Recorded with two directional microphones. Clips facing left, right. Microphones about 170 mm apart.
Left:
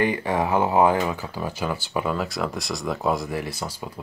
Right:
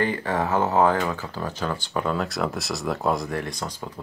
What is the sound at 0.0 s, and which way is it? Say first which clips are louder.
Speech: left 2 dB; 15° left (ahead or behind).